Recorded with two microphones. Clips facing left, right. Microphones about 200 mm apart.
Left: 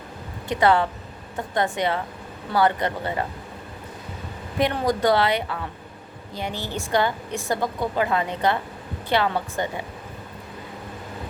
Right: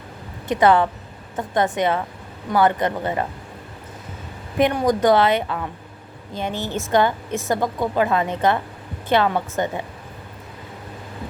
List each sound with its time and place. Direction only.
0.5 s a woman's voice: 20° right (ahead or behind)
4.5 s a woman's voice: 20° right (ahead or behind)
7.9 s a woman's voice: 20° left (ahead or behind)
8.2 s a woman's voice: 20° right (ahead or behind)